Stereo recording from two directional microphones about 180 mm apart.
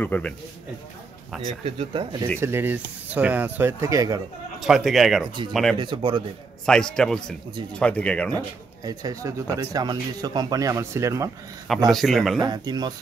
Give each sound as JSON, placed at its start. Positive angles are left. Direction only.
{"t": 0.0, "sound": "speech", "side_deg": 10}
{"t": 1.6, "sound": "speech", "side_deg": -35}
{"t": 2.4, "sound": "speech", "side_deg": -10}
{"t": 4.6, "sound": "speech", "side_deg": 0}
{"t": 5.8, "sound": "speech", "side_deg": -25}
{"t": 6.6, "sound": "speech", "side_deg": 5}
{"t": 8.8, "sound": "speech", "side_deg": -20}
{"t": 11.9, "sound": "speech", "side_deg": 0}
{"t": 12.4, "sound": "speech", "side_deg": -25}